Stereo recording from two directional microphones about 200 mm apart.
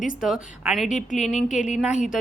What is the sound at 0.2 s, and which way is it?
Speech, centre (ahead or behind).